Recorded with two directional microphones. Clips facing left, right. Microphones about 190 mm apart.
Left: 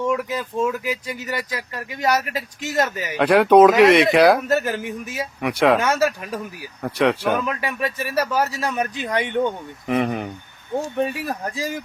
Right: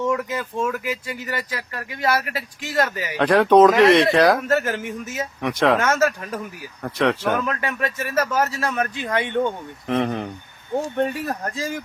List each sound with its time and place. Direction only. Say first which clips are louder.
0.0 s speech: even; 15° left (ahead or behind)
3.2 s speech: left 1 dB; 5° left (ahead or behind)